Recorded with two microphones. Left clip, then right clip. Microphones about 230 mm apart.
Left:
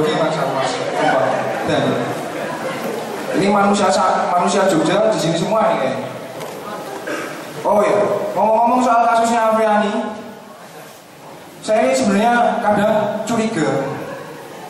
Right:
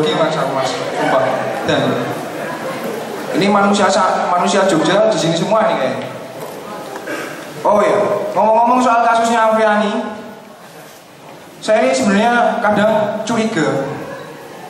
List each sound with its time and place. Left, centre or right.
0.0 s a sound: centre
3.3 s a man's voice: centre
7.6 s a man's voice: centre
11.6 s a man's voice: centre